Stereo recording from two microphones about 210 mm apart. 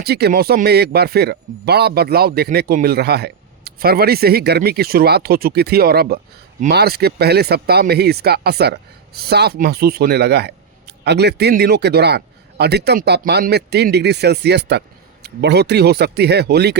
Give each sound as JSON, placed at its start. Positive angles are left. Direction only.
{"t": 0.0, "sound": "speech", "side_deg": -50}